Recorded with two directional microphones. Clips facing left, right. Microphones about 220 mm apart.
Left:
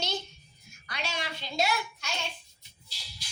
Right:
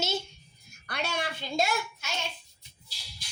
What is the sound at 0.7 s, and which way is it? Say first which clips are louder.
A woman's voice: right 4 dB; 55° right (ahead or behind).